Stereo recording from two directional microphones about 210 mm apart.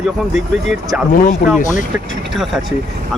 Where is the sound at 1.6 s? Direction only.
35° left (ahead or behind).